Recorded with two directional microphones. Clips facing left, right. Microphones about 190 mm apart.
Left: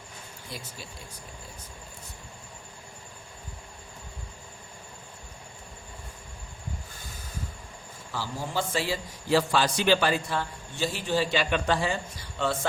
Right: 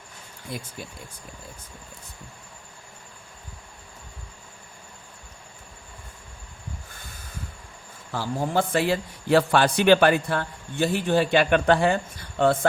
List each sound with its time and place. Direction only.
0.5 s speech: 55° right (ahead or behind)
8.1 s a man's voice: 55° right (ahead or behind)